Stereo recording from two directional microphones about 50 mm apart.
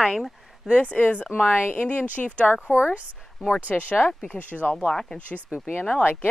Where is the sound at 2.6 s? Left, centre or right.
Right.